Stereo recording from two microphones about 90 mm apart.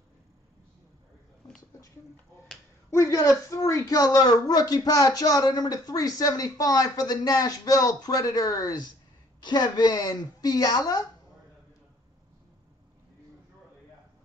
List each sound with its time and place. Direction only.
2.9 s a woman's voice: 35° left (ahead or behind); by 11.1 s 50° left (ahead or behind)